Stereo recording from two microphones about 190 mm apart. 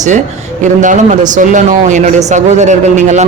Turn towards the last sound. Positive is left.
turn(degrees=-40)  # may be behind; listen again after turning